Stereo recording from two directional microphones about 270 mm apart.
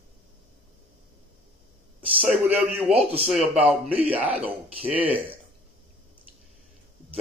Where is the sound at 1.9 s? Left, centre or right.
Centre.